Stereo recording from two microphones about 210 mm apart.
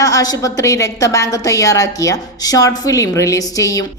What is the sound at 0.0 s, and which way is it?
A woman's voice, 15° left (ahead or behind).